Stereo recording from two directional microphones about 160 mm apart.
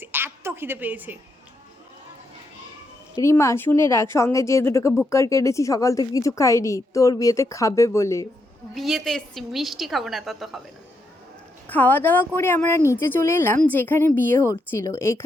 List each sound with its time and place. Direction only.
0.0 s a woman's voice: 15° right (ahead or behind)
3.2 s a woman's voice: 20° left (ahead or behind)
8.7 s a woman's voice: centre (ahead or behind)
11.7 s a woman's voice: 10° left (ahead or behind)